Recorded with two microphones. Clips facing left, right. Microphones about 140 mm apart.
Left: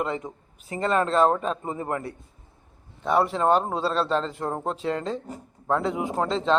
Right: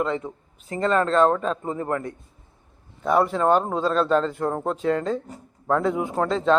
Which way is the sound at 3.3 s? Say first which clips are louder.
Right 1 dB; 30° left (ahead or behind).